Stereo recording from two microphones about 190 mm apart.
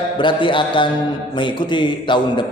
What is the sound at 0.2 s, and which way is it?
A man's voice, 25° left (ahead or behind).